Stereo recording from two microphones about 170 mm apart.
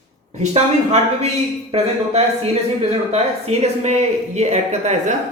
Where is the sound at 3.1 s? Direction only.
40° right (ahead or behind).